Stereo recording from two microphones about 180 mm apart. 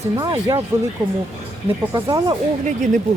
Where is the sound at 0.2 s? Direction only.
20° right (ahead or behind).